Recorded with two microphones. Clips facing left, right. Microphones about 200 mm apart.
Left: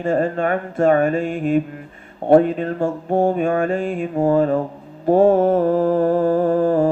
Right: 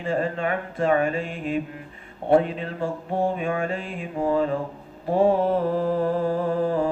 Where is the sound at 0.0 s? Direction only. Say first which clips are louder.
Left 6 dB; 45° left (ahead or behind).